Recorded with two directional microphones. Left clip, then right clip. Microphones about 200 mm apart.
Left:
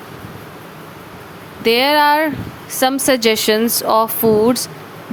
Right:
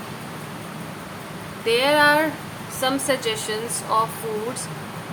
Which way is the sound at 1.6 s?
55° left (ahead or behind).